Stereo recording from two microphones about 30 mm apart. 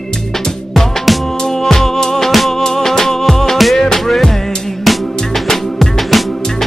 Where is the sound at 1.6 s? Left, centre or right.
Centre.